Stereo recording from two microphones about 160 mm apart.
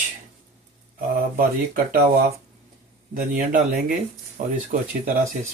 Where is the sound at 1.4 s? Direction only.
60° right (ahead or behind).